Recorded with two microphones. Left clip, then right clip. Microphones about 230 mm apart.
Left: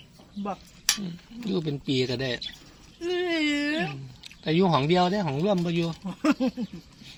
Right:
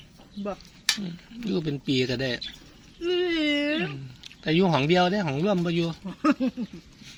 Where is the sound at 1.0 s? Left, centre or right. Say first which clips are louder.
Right 1 dB; centre.